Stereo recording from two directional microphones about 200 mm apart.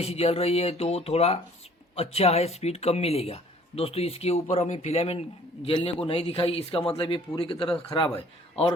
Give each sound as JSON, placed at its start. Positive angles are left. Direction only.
{"t": 0.0, "sound": "speech", "side_deg": 30}